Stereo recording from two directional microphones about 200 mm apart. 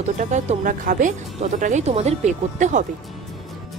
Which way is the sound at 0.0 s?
35° right (ahead or behind).